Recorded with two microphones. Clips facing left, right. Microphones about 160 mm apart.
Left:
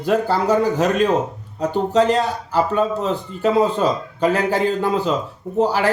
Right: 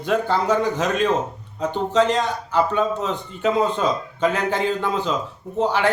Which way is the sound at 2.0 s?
5° left (ahead or behind).